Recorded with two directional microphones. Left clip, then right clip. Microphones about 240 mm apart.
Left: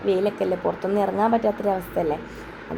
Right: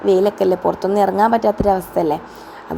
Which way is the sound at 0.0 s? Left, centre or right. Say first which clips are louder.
Right 8 dB; right.